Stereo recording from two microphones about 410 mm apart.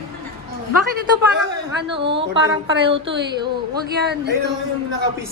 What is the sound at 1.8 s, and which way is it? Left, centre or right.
Speech, centre.